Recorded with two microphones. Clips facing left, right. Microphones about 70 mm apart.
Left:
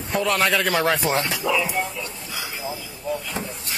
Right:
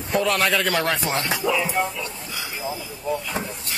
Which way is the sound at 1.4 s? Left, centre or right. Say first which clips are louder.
Even; centre.